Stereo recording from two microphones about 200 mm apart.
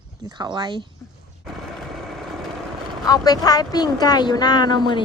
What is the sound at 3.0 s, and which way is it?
Speech, 20° left (ahead or behind).